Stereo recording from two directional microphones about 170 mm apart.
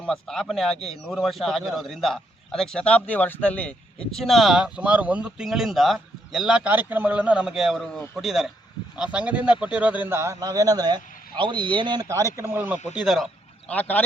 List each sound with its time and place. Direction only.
0.0 s a man's voice: 5° left (ahead or behind)
13.7 s speech: 10° left (ahead or behind)